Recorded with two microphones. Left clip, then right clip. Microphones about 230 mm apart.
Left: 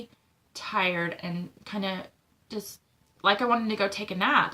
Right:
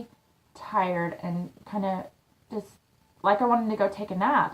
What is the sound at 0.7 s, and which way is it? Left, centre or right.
Speech, centre.